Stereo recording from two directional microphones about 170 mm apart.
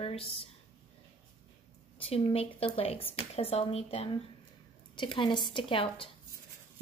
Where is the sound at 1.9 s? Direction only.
35° left (ahead or behind).